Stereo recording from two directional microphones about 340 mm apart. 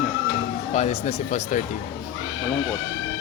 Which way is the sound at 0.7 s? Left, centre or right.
Centre.